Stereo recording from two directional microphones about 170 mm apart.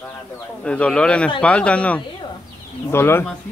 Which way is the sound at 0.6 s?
5° left (ahead or behind).